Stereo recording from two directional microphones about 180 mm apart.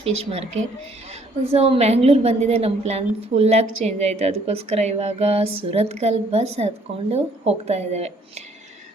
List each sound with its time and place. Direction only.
0.0 s a woman's voice: 35° right (ahead or behind)
1.5 s a woman's voice: 35° right (ahead or behind)